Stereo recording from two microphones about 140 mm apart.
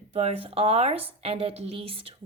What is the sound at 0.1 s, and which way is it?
A woman's voice, 45° right (ahead or behind).